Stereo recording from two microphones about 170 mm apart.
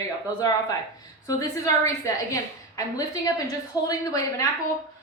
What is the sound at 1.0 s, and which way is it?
A woman's voice, 20° left (ahead or behind).